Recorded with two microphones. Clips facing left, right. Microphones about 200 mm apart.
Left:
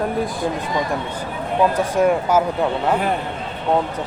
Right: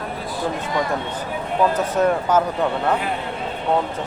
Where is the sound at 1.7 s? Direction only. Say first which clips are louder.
Left 2 dB; 10° left (ahead or behind).